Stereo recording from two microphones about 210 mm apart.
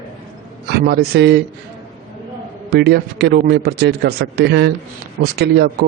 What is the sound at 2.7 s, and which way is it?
Speech, 50° right (ahead or behind).